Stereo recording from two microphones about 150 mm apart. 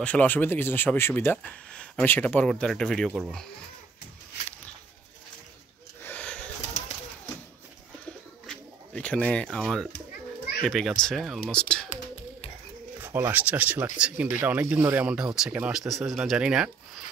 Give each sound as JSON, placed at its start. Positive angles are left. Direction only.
{"t": 0.0, "sound": "speech", "side_deg": 10}
{"t": 6.0, "sound": "a sound", "side_deg": 10}
{"t": 8.5, "sound": "speech", "side_deg": 10}
{"t": 13.0, "sound": "speech", "side_deg": -15}